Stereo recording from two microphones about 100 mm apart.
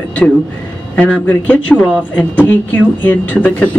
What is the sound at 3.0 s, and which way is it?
Speech, 15° left (ahead or behind).